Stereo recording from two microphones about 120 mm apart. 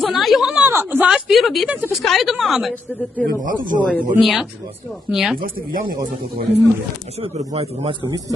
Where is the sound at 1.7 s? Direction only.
10° right (ahead or behind).